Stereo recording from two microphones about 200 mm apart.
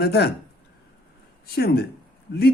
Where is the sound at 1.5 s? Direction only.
50° left (ahead or behind).